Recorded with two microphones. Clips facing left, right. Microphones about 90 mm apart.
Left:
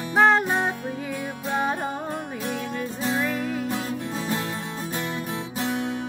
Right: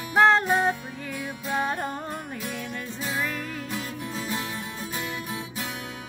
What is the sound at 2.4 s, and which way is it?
Music, 40° left (ahead or behind).